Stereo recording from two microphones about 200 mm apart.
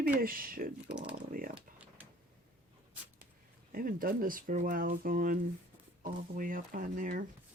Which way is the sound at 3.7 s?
45° right (ahead or behind).